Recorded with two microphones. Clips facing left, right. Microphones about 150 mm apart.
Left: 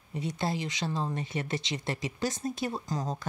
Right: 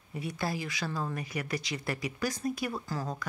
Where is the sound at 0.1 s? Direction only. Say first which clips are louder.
Left 2 dB; 20° left (ahead or behind).